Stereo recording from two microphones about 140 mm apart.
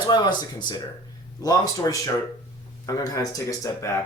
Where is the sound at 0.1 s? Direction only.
30° left (ahead or behind).